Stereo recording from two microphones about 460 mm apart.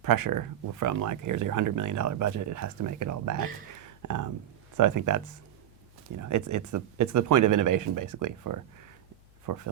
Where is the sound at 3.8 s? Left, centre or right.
Right.